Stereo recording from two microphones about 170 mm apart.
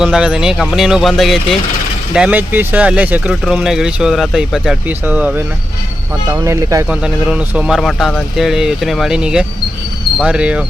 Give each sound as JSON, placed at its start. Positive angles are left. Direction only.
{"t": 0.0, "sound": "speech", "side_deg": -5}
{"t": 6.8, "sound": "speech", "side_deg": -5}